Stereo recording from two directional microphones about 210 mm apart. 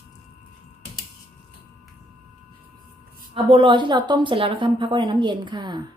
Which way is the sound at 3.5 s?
20° right (ahead or behind).